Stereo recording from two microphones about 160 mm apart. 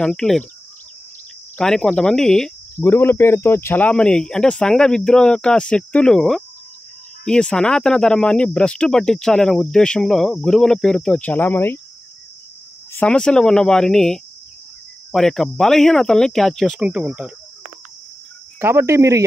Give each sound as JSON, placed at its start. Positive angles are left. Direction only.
{"t": 0.0, "sound": "speech", "side_deg": 5}
{"t": 1.6, "sound": "speech", "side_deg": 5}
{"t": 12.9, "sound": "speech", "side_deg": 5}
{"t": 18.6, "sound": "speech", "side_deg": -15}